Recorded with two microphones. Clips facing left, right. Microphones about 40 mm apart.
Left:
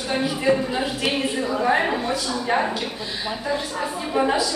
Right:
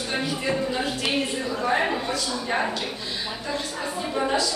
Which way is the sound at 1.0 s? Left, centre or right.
Centre.